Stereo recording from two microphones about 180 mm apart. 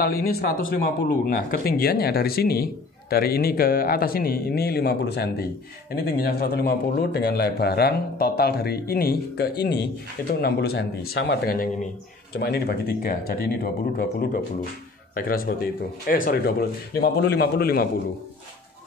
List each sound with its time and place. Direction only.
0.0 s speech: 55° left (ahead or behind)